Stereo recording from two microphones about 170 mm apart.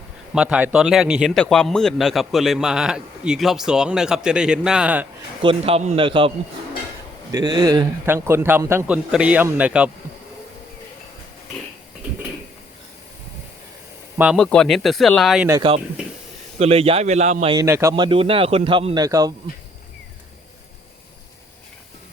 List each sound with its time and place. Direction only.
0.3 s a man's voice: 5° right (ahead or behind)
5.4 s a man's voice: 35° right (ahead or behind); by 9.9 s 5° right (ahead or behind)
14.3 s a man's voice: 5° left (ahead or behind)
15.6 s a man's voice: 30° right (ahead or behind)
17.5 s a man's voice: 15° right (ahead or behind)
17.9 s a man's voice: 30° right (ahead or behind)